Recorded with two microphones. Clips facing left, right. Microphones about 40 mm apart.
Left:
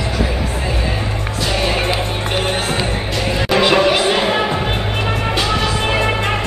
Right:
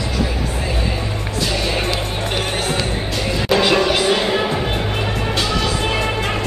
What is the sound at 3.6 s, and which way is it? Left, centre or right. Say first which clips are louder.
Music: left 4 dB; left.